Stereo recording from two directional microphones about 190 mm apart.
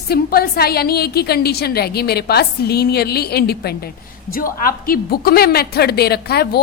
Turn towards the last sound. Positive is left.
turn(degrees=55)  # may be behind; listen again after turning